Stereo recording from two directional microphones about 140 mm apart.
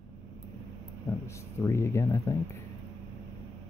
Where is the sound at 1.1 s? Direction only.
20° left (ahead or behind).